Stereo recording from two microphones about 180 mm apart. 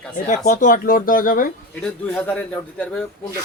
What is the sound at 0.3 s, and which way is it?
Speech, 45° left (ahead or behind).